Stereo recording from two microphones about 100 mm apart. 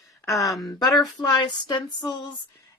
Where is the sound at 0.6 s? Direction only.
40° left (ahead or behind).